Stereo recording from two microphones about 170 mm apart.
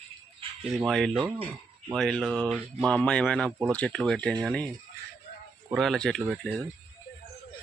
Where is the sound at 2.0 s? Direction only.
5° left (ahead or behind).